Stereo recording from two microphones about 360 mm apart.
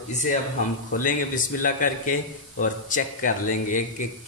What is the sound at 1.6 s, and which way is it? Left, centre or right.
Speech, left.